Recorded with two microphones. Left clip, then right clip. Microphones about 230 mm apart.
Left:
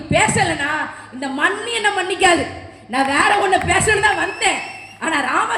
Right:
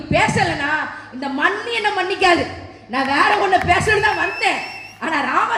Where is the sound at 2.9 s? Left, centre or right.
Left.